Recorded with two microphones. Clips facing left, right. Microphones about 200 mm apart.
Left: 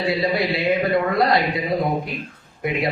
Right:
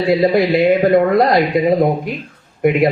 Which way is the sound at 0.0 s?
50° right (ahead or behind).